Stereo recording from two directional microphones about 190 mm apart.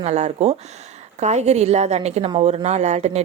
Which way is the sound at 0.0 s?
35° right (ahead or behind).